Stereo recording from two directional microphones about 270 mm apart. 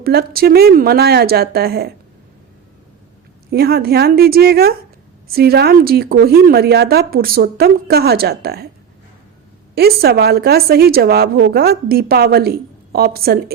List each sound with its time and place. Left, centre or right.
0.0 s a woman's voice: right
3.5 s a woman's voice: right
9.7 s a woman's voice: right